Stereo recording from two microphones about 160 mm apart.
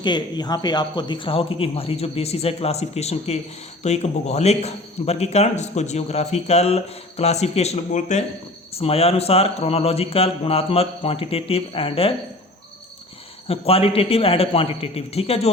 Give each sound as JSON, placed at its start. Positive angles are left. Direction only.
{"t": 0.0, "sound": "a man's voice", "side_deg": 25}
{"t": 13.5, "sound": "a man's voice", "side_deg": 40}